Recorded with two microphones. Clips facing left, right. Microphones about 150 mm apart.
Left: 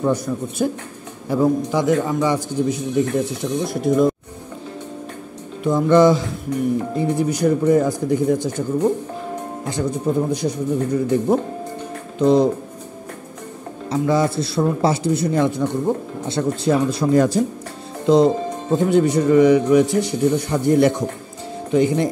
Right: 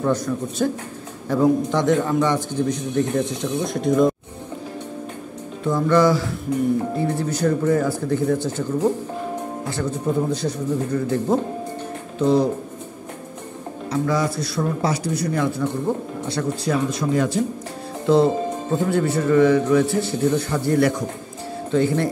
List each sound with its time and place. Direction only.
0.0 s a man's voice: 10° left (ahead or behind)
5.6 s a man's voice: 20° left (ahead or behind)
9.7 s a man's voice: 15° left (ahead or behind)
13.8 s speech: 25° left (ahead or behind)
17.1 s speech: 40° left (ahead or behind)
18.0 s a man's voice: 15° left (ahead or behind)